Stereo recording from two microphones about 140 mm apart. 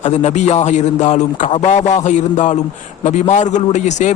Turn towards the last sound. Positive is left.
turn(degrees=55)  # may be behind; listen again after turning